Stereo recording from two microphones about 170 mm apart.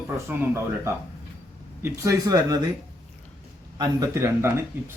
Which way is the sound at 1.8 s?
20° right (ahead or behind).